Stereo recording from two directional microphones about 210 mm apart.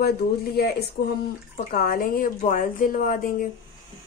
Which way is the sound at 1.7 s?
45° left (ahead or behind).